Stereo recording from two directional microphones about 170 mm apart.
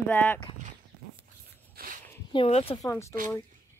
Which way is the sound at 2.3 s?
35° left (ahead or behind).